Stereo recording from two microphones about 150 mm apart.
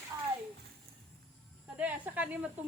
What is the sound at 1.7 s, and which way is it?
Speech, 10° right (ahead or behind).